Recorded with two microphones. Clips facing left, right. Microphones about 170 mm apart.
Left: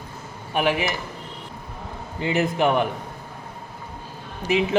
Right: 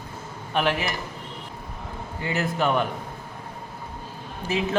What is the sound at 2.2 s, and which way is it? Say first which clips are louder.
Speech: left 4 dB; 20° left (ahead or behind).